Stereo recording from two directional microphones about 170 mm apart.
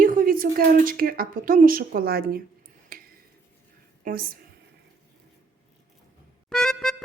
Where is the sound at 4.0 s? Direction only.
55° right (ahead or behind).